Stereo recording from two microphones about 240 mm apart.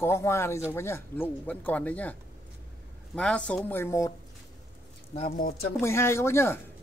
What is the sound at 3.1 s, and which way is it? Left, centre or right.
Speech, centre.